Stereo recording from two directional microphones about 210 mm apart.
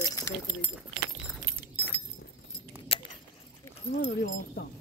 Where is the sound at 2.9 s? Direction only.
25° left (ahead or behind).